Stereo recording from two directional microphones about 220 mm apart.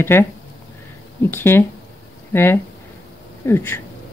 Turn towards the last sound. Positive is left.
turn(degrees=10)  # may be behind; listen again after turning